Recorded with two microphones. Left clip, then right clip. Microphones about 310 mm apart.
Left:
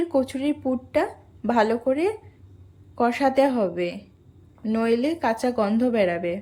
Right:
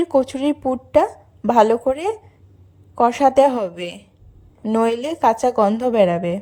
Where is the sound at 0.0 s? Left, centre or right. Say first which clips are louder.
Right 6 dB; right.